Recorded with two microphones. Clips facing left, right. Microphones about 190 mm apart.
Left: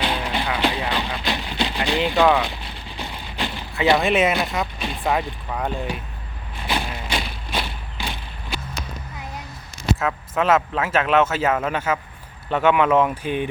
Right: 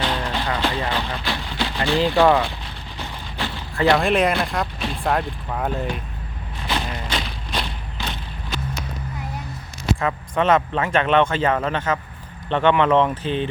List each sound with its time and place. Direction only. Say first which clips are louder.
0.0 s vehicle: even; 10° left (ahead or behind)
2.1 s speech: right 1 dB; centre (ahead or behind)
3.0 s a sound: left 1 dB; 15° left (ahead or behind)
3.8 s speech: right 1 dB; centre (ahead or behind)
6.7 s thump: even; 10° left (ahead or behind)
10.0 s speech: right 4 dB; centre (ahead or behind)